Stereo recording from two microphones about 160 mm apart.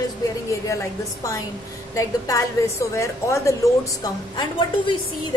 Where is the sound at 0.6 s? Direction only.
20° left (ahead or behind).